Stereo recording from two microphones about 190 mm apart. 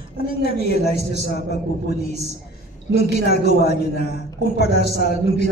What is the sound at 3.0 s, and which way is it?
A man's voice, 55° left (ahead or behind).